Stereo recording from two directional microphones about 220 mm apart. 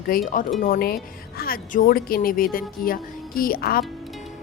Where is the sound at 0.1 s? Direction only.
40° left (ahead or behind).